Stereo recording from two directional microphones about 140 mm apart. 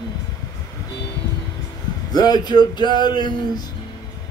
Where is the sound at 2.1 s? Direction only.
30° left (ahead or behind).